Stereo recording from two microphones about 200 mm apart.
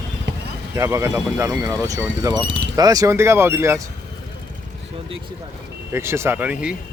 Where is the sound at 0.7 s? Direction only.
15° right (ahead or behind).